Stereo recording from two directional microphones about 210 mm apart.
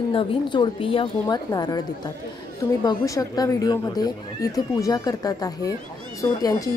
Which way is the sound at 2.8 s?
20° left (ahead or behind).